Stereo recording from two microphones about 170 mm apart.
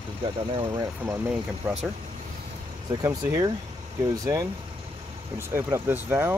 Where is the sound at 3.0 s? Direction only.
20° right (ahead or behind).